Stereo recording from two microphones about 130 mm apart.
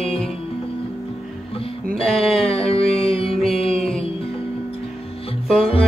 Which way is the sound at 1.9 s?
5° left (ahead or behind).